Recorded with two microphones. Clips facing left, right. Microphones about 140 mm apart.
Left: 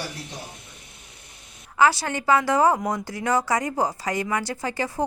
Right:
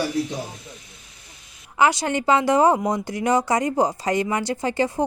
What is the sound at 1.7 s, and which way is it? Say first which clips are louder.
Speech: right 1 dB; 20° right (ahead or behind).